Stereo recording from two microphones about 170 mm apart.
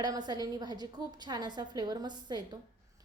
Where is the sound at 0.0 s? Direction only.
25° right (ahead or behind).